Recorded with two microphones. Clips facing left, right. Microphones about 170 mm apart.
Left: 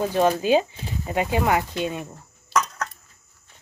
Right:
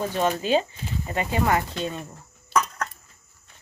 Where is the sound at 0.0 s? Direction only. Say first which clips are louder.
Left 4 dB; 10° left (ahead or behind).